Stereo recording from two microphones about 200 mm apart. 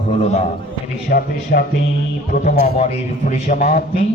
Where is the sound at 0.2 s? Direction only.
35° left (ahead or behind).